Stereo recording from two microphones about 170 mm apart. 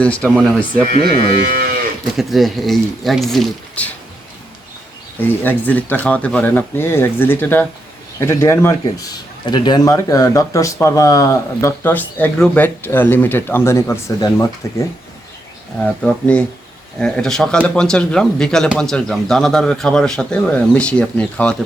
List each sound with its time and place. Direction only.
0.0 s speech: 5° left (ahead or behind)
1.3 s moo: 60° right (ahead or behind)
2.1 s speech: centre (ahead or behind)
5.4 s speech: 10° left (ahead or behind)
15.8 s speech: 5° left (ahead or behind)